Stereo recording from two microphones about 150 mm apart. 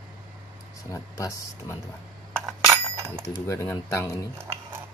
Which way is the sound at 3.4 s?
20° left (ahead or behind).